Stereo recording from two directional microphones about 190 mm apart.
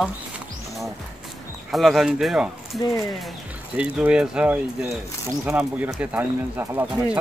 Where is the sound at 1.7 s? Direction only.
Centre (ahead or behind).